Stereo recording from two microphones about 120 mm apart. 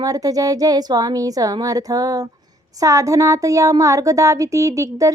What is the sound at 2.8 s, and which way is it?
Speech, 25° right (ahead or behind).